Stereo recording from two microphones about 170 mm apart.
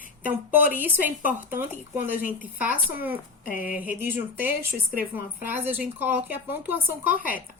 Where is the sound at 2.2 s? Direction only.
55° left (ahead or behind).